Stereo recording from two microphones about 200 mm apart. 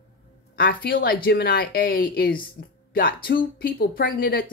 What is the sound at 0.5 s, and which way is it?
Speech, 50° left (ahead or behind).